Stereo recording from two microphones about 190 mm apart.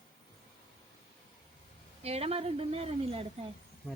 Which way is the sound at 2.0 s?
30° right (ahead or behind).